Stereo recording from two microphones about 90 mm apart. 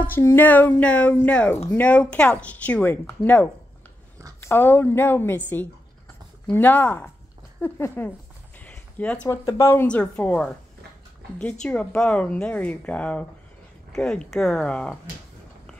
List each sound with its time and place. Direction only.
0.0 s a woman's voice: 25° left (ahead or behind)
8.5 s a sound: 15° left (ahead or behind)
9.3 s speech: 35° left (ahead or behind)
9.8 s speech: 15° left (ahead or behind)
11.6 s speech: 10° left (ahead or behind)